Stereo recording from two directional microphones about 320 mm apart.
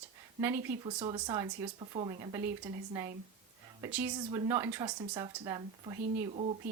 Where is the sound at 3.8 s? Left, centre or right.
Centre.